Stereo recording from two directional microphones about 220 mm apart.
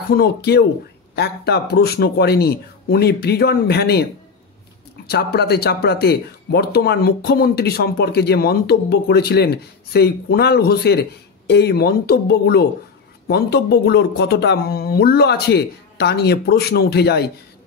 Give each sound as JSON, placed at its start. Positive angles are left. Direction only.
{"t": 0.1, "sound": "speech", "side_deg": 45}
{"t": 5.0, "sound": "speech", "side_deg": 45}